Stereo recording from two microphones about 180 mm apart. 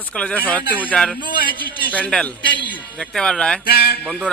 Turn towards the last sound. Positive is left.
turn(degrees=-5)  # may be behind; listen again after turning